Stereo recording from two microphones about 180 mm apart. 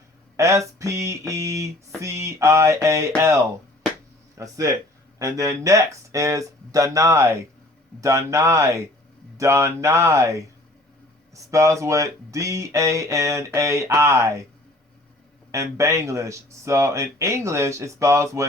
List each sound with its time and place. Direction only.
0.3 s speech: 15° right (ahead or behind)
15.5 s speech: 15° right (ahead or behind)